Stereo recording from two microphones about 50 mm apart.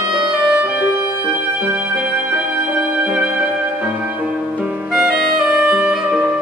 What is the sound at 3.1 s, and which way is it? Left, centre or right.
Music, centre.